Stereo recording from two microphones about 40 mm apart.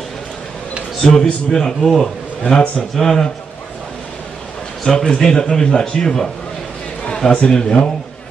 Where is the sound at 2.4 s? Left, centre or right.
Left.